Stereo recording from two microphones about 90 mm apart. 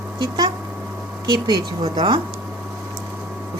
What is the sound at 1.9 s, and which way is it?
Speech, 60° right (ahead or behind).